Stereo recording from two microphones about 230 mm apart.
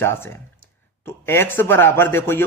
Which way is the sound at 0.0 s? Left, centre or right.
Centre.